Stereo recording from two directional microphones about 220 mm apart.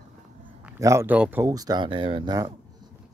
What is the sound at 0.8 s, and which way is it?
Speech, 10° right (ahead or behind).